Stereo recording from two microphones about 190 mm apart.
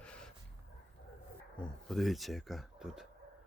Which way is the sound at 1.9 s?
Centre (ahead or behind).